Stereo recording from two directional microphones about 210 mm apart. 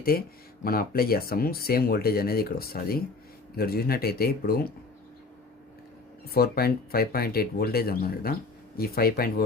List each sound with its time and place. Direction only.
0.1 s speech: 45° left (ahead or behind)
6.3 s speech: 45° left (ahead or behind)